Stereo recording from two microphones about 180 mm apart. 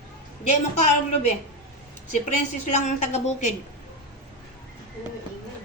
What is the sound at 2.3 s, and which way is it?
A woman's voice, 40° left (ahead or behind).